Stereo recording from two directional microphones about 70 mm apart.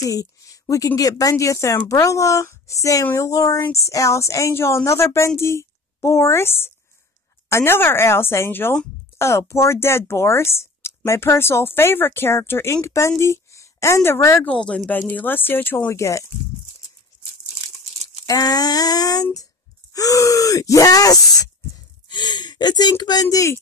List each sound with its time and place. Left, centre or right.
0.0 s a sound: left
0.8 s a woman's voice: left
14.4 s speech: centre
15.9 s a woman's voice: left
18.2 s a sound: left
19.9 s speech: left
22.1 s speech: left